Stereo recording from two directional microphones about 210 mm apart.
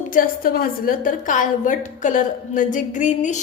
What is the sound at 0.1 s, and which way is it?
A woman's voice, 40° left (ahead or behind).